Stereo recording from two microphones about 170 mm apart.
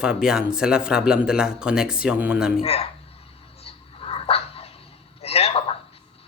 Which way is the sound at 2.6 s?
35° left (ahead or behind).